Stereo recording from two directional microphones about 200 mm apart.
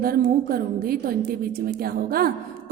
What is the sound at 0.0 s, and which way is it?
A woman's voice, 50° right (ahead or behind).